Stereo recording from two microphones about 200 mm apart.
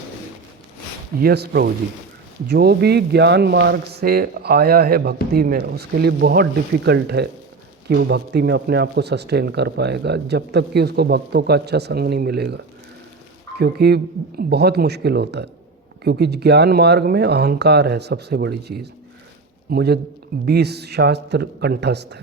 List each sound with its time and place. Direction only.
1.2 s speech: 50° right (ahead or behind)